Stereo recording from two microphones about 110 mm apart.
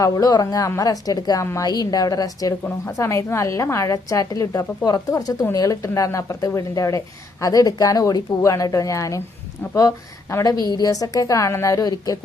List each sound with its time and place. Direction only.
0.0 s a woman's voice: 35° left (ahead or behind)
2.6 s a woman's voice: 25° left (ahead or behind)